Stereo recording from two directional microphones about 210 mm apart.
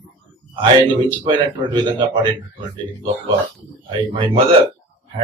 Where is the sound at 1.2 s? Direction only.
20° right (ahead or behind).